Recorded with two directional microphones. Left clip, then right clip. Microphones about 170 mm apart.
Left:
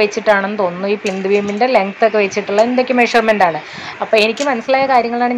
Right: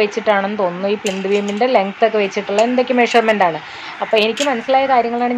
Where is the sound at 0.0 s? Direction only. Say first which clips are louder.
Left 2 dB; 10° left (ahead or behind).